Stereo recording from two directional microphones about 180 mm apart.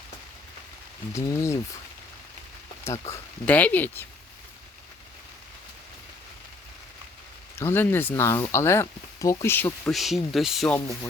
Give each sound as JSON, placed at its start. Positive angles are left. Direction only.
{"t": 1.1, "sound": "speech", "side_deg": 15}
{"t": 2.8, "sound": "speech", "side_deg": 15}
{"t": 7.6, "sound": "speech", "side_deg": 10}